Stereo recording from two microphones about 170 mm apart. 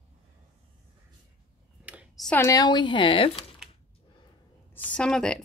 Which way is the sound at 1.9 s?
10° right (ahead or behind).